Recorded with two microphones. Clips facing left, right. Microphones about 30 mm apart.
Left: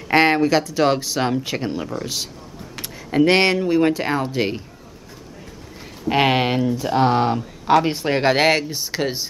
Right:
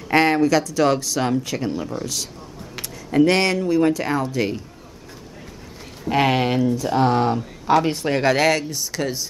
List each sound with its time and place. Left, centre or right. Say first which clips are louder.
0.1 s speech: left 1 dB; left
6.0 s speech: left 1 dB; left